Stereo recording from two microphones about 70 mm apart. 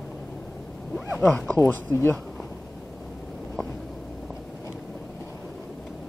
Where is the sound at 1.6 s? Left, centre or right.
Left.